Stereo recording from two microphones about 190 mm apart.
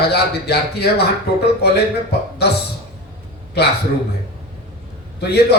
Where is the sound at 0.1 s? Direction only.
60° left (ahead or behind).